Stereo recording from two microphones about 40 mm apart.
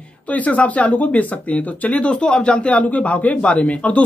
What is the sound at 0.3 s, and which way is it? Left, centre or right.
Speech, left.